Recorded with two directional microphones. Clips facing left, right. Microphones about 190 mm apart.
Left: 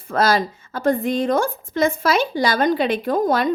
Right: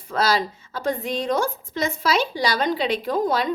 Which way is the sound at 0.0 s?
50° left (ahead or behind).